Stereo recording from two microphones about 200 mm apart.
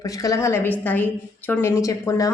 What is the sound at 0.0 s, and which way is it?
A woman's voice, 15° left (ahead or behind).